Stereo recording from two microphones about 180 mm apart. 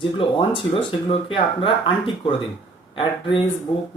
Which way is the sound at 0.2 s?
30° left (ahead or behind).